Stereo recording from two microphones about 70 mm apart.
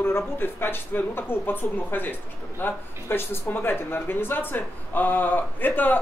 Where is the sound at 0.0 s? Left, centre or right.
Left.